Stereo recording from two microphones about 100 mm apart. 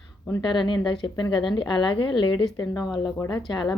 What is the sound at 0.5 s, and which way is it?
A woman's voice, 50° left (ahead or behind).